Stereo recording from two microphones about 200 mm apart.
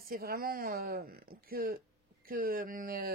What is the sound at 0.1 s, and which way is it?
Speech, 50° right (ahead or behind).